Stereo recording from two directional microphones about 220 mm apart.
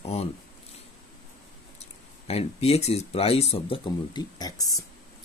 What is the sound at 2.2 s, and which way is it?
Speech, 30° left (ahead or behind).